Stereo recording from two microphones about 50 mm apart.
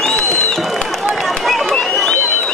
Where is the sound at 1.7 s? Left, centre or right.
Centre.